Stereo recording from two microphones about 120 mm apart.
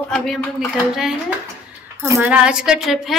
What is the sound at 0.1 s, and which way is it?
Speech, 5° left (ahead or behind).